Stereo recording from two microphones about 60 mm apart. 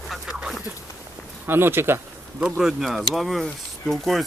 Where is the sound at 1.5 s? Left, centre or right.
Right.